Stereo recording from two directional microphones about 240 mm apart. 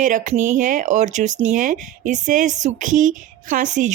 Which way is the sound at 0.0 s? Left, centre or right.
Right.